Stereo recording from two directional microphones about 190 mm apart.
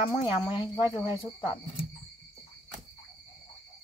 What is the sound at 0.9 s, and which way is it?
Cricket, 25° left (ahead or behind).